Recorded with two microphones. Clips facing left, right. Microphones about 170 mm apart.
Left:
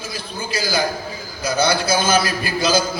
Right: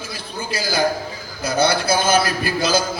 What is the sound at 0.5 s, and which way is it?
A man's voice, 60° right (ahead or behind).